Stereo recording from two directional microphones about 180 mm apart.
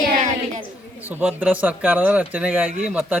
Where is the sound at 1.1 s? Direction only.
10° right (ahead or behind).